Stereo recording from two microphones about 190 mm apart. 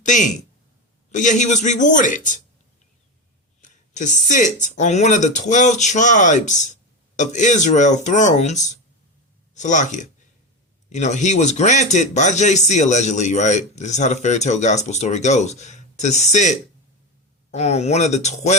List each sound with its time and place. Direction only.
0.0 s a man's voice: 40° left (ahead or behind)
3.6 s a sound: 40° left (ahead or behind)
4.6 s a man's voice: 40° left (ahead or behind)